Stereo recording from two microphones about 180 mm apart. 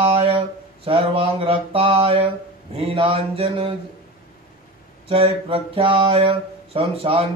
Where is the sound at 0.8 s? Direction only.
30° right (ahead or behind).